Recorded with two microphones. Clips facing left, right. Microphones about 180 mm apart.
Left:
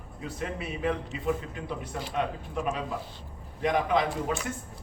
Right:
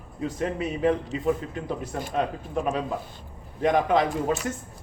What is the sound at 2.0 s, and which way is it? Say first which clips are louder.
Speech: right 3 dB; 45° right (ahead or behind).